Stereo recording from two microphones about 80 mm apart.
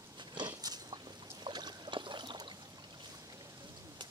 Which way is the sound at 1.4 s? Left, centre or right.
Right.